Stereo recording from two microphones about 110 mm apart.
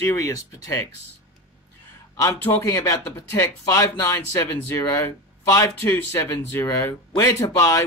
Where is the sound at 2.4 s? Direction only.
20° left (ahead or behind).